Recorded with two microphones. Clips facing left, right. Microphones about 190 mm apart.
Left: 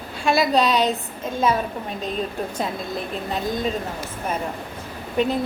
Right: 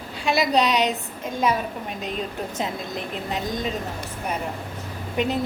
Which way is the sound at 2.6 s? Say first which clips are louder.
Left 1 dB; 20° right (ahead or behind).